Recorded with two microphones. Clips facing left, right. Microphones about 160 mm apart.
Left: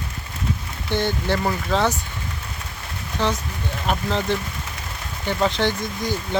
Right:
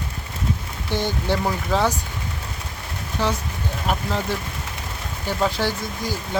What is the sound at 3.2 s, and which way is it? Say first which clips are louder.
Speech: left 1 dB; 10° right (ahead or behind).